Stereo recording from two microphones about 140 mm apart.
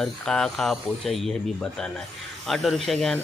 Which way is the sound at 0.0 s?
5° left (ahead or behind).